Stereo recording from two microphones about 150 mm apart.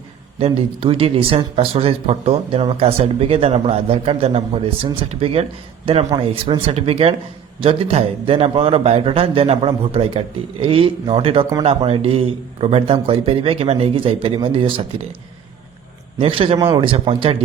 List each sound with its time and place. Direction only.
0.3 s speech: 40° right (ahead or behind)
16.1 s speech: 40° right (ahead or behind)